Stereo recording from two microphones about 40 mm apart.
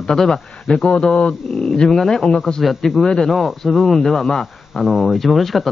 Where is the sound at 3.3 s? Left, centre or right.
Centre.